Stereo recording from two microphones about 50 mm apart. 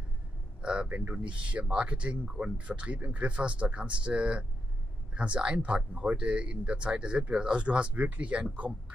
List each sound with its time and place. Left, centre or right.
0.6 s speech: right
7.9 s speech: right